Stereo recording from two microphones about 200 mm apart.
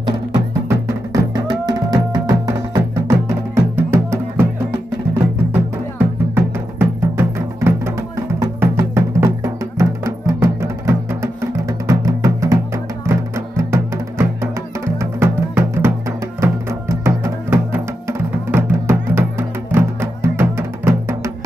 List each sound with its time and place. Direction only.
0.7 s music: 15° right (ahead or behind)
5.5 s music: 10° right (ahead or behind)
16.9 s music: 15° right (ahead or behind)